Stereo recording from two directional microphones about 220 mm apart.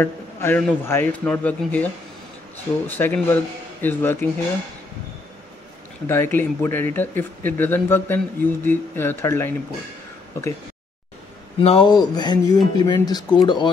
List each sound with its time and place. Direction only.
0.0 s speech: 10° left (ahead or behind)
3.0 s speech: 10° left (ahead or behind)
6.0 s speech: 10° left (ahead or behind)
11.6 s speech: 25° left (ahead or behind)